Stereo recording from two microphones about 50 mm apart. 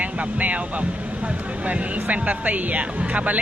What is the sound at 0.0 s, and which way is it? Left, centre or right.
Speech, right.